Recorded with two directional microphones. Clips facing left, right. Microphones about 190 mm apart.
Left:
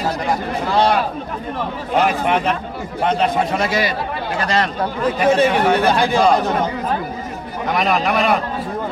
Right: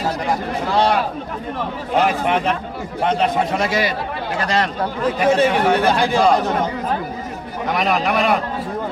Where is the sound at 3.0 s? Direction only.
20° right (ahead or behind).